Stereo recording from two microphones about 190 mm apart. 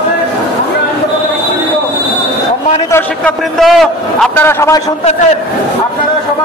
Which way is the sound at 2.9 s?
10° left (ahead or behind).